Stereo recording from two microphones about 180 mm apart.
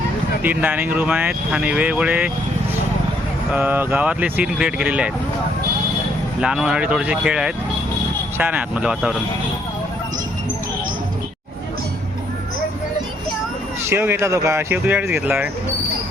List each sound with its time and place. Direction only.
0.4 s speech: 10° right (ahead or behind)
3.5 s speech: 10° right (ahead or behind)
6.4 s speech: 5° right (ahead or behind)
13.9 s speech: 15° right (ahead or behind)